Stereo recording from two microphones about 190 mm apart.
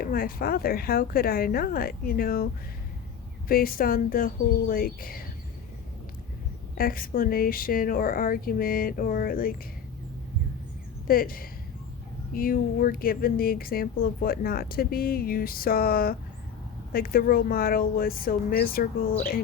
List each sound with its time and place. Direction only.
0.0 s speech: 50° left (ahead or behind)
3.5 s speech: 50° left (ahead or behind)
6.7 s speech: 50° left (ahead or behind)
11.1 s speech: 50° left (ahead or behind)